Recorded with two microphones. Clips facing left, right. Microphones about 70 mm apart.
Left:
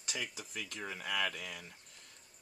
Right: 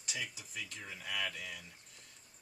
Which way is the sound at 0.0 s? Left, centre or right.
Left.